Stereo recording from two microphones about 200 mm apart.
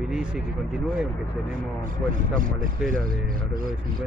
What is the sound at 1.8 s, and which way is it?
Speech, 40° right (ahead or behind).